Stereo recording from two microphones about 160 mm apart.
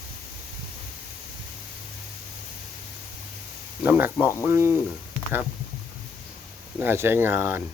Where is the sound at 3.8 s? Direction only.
10° right (ahead or behind).